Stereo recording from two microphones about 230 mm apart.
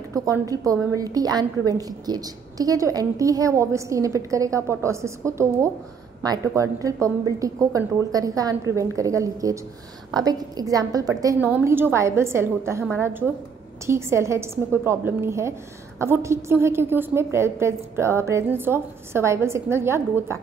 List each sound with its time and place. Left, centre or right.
0.1 s a woman's voice: centre